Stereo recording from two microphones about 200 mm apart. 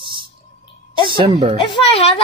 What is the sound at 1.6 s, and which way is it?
Speech, 25° left (ahead or behind).